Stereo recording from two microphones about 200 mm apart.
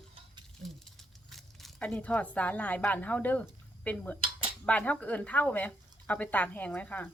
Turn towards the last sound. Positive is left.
turn(degrees=10)  # may be behind; listen again after turning